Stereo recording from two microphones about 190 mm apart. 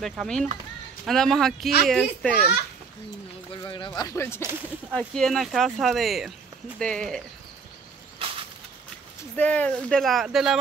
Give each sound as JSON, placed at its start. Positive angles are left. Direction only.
{"t": 0.0, "sound": "speech", "side_deg": 0}
{"t": 3.6, "sound": "speech", "side_deg": 20}
{"t": 4.9, "sound": "speech", "side_deg": 0}
{"t": 8.2, "sound": "a sound", "side_deg": -30}
{"t": 9.4, "sound": "speech", "side_deg": 5}